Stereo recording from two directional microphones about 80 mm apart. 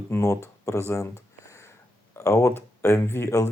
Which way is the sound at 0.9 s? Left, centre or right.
Left.